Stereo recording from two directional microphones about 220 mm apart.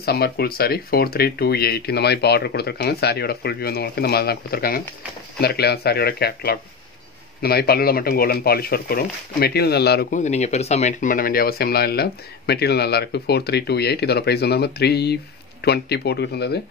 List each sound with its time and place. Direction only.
0.0 s speech: 45° left (ahead or behind)
10.2 s speech: 30° left (ahead or behind); by 16.5 s 45° left (ahead or behind)